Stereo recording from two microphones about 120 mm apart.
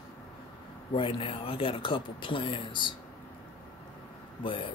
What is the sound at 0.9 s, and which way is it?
Speech, 50° left (ahead or behind).